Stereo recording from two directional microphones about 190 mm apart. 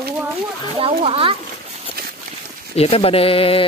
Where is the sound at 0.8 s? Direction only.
30° right (ahead or behind).